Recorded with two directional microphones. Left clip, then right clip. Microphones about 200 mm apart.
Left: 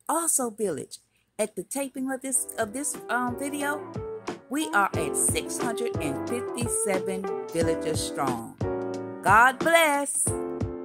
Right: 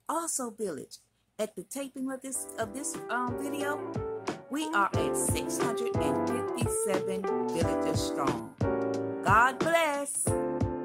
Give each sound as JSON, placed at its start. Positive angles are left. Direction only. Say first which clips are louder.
{"t": 0.0, "sound": "speech", "louder": "left 6 dB", "side_deg": 15}
{"t": 9.2, "sound": "speech", "louder": "left 5 dB", "side_deg": 10}
{"t": 10.3, "sound": "speech", "louder": "right 1 dB", "side_deg": 0}